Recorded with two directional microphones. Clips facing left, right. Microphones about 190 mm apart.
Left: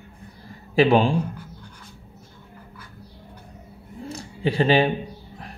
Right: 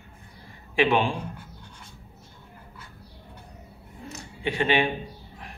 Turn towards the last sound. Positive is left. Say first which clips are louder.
# left 5 dB
turn(degrees=35)  # may be behind; listen again after turning